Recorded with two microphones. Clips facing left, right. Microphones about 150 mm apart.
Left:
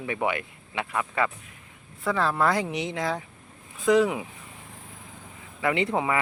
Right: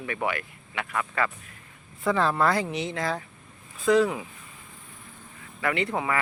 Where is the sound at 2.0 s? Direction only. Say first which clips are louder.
Right 1 dB; 5° left (ahead or behind).